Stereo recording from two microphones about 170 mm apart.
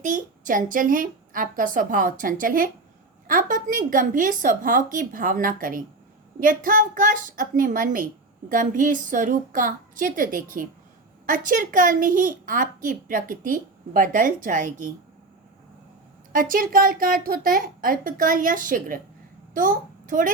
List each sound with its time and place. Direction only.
0.0 s a woman's voice: 50° right (ahead or behind)
16.3 s a woman's voice: 55° right (ahead or behind)